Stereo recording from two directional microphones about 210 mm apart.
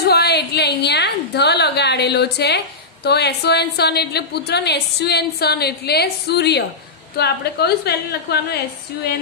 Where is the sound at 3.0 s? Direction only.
50° left (ahead or behind).